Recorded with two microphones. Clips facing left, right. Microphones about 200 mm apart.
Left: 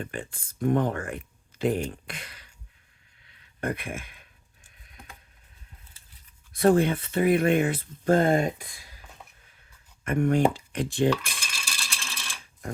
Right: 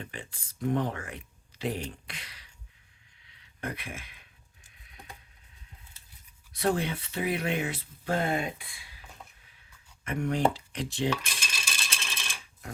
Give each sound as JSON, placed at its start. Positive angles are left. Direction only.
{"t": 0.0, "sound": "speech", "side_deg": 50}
{"t": 3.2, "sound": "a sound", "side_deg": 50}
{"t": 6.5, "sound": "speech", "side_deg": 50}
{"t": 10.0, "sound": "speech", "side_deg": 50}
{"t": 11.2, "sound": "ratchet", "side_deg": -20}